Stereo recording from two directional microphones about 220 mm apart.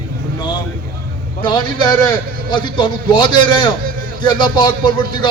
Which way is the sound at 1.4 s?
20° left (ahead or behind).